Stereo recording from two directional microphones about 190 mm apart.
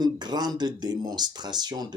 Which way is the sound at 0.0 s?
20° right (ahead or behind).